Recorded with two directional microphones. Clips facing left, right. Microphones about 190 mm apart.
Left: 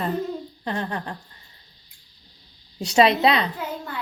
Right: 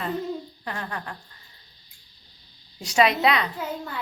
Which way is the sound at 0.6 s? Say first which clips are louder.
Left 5 dB; 25° left (ahead or behind).